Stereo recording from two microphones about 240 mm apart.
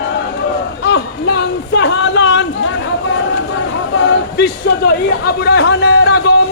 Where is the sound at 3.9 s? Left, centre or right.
Left.